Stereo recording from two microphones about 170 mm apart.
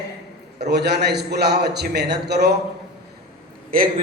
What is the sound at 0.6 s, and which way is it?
A man's voice, 75° right (ahead or behind).